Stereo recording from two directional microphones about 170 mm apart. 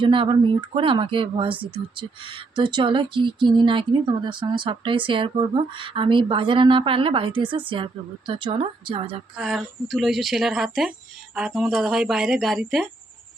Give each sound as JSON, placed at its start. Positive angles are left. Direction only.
{"t": 0.0, "sound": "speech", "side_deg": -30}
{"t": 9.4, "sound": "speech", "side_deg": 0}